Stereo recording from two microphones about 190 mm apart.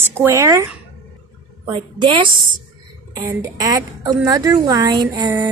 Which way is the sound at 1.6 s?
25° right (ahead or behind).